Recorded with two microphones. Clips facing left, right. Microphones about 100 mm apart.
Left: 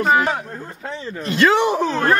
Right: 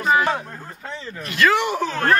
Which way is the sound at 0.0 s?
40° left (ahead or behind).